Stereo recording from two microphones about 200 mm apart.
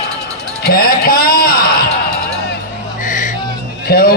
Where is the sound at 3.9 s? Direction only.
50° left (ahead or behind).